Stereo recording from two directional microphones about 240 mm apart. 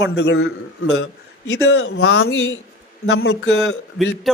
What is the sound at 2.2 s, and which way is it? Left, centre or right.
Speech, left.